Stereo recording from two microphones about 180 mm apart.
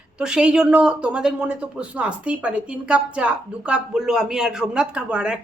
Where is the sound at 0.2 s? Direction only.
5° right (ahead or behind).